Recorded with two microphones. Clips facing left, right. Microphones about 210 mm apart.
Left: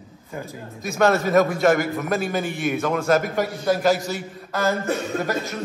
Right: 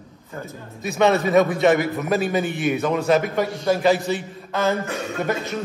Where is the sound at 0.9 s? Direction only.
Centre (ahead or behind).